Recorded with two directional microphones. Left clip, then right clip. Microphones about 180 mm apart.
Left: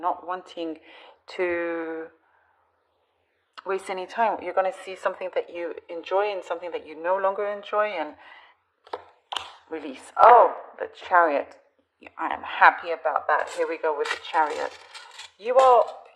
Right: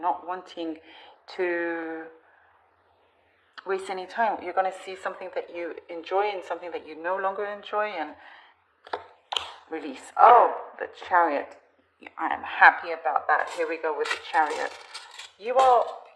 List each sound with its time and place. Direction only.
0.0 s a woman's voice: 30° left (ahead or behind)
3.5 s a woman's voice: 30° left (ahead or behind)
15.5 s speech: 45° left (ahead or behind)